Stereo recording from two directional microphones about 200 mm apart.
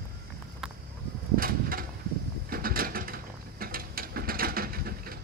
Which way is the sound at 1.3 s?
45° right (ahead or behind).